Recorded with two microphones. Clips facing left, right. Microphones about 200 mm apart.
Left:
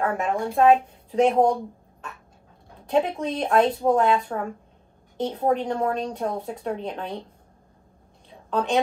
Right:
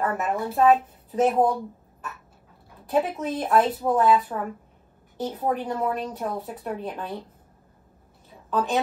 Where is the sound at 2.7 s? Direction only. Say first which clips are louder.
Left 1 dB; 25° left (ahead or behind).